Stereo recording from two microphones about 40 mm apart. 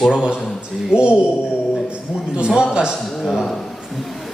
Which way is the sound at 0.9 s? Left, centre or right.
Right.